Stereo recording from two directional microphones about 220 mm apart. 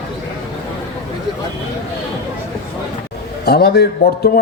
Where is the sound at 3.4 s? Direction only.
45° left (ahead or behind).